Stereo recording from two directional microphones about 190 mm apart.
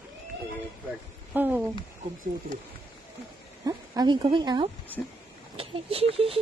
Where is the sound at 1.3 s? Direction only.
10° right (ahead or behind).